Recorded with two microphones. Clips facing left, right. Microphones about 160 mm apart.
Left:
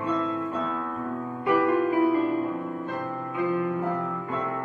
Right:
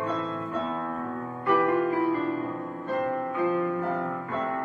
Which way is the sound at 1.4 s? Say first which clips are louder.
Left 1 dB; 10° left (ahead or behind).